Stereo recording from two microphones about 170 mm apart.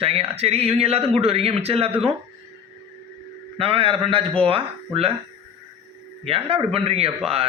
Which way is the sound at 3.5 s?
35° right (ahead or behind).